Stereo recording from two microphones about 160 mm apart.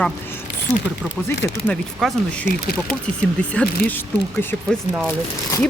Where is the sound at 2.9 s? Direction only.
10° right (ahead or behind).